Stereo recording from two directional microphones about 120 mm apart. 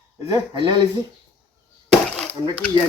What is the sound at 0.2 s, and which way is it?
Speech, 35° right (ahead or behind).